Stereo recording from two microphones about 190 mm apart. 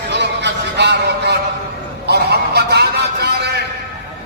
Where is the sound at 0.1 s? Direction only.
65° right (ahead or behind).